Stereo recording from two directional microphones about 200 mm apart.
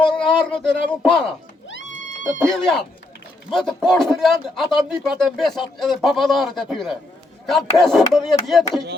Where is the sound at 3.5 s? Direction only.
Centre (ahead or behind).